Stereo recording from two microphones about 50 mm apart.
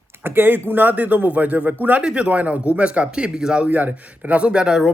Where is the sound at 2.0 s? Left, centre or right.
Centre.